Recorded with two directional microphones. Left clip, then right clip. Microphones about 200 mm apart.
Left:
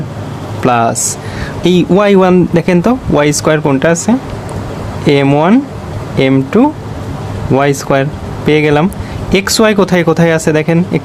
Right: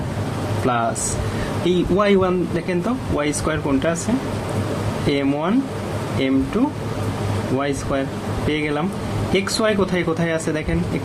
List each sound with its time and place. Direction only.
0.6 s speech: 55° left (ahead or behind)
5.0 s speech: 50° left (ahead or behind)